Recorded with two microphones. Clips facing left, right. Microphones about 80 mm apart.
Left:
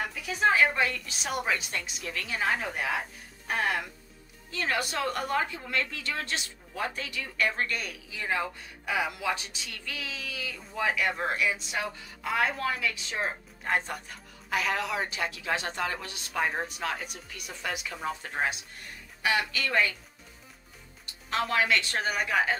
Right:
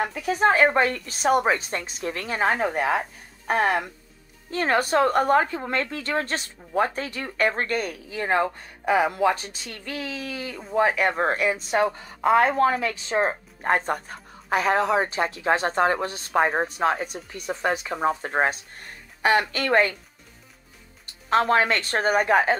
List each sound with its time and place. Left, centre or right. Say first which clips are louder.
0.0 s speech: right 6 dB; right
21.0 s speech: right 9 dB; right